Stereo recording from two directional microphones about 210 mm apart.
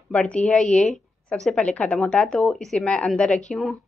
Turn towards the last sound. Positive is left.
turn(degrees=5)  # may be behind; listen again after turning